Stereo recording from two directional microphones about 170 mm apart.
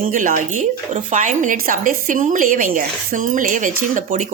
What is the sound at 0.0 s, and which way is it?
A woman's voice, 50° right (ahead or behind).